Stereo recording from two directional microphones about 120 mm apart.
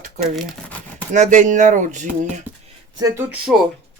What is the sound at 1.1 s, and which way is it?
Speech, 90° right.